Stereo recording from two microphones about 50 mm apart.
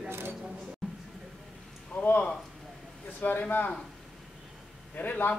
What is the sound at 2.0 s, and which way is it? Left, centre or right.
A man's voice, left.